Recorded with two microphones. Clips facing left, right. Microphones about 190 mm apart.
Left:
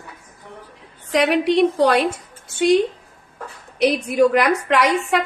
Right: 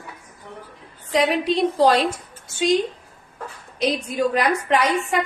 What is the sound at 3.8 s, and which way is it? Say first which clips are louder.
A woman's voice: left 6 dB; 70° left (ahead or behind).